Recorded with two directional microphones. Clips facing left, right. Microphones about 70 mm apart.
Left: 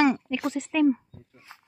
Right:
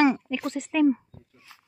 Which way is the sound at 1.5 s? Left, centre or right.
Left.